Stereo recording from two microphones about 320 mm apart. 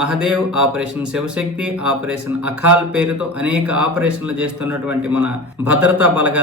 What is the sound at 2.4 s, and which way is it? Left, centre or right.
Speech, right.